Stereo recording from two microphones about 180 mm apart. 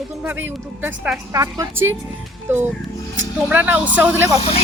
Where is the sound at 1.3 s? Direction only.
15° right (ahead or behind).